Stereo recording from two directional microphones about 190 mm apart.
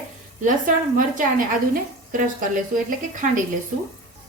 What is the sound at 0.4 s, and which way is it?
A woman's voice, 45° right (ahead or behind).